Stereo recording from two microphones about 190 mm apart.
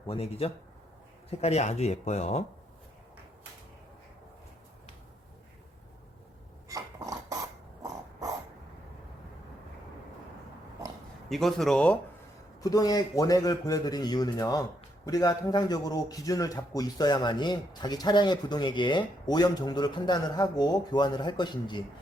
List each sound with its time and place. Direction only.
0.1 s speech: 30° left (ahead or behind)
6.7 s a sound: 15° right (ahead or behind)
11.3 s a man's voice: centre (ahead or behind)
12.6 s speech: 20° left (ahead or behind)